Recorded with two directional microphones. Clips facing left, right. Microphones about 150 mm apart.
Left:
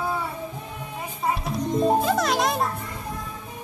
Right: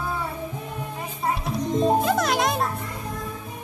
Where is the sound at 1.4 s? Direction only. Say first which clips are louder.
Even; centre (ahead or behind).